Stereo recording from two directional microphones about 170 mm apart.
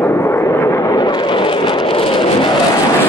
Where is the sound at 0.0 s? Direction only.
15° left (ahead or behind); by 2.5 s 30° left (ahead or behind).